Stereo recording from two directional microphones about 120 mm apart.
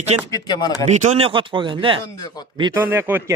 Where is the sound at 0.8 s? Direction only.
75° right (ahead or behind).